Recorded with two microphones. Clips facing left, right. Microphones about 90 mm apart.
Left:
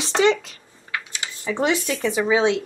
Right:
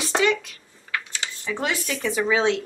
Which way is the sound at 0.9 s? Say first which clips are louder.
Even; 15° left (ahead or behind).